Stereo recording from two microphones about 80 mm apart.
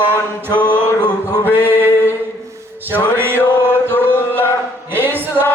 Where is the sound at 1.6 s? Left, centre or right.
Left.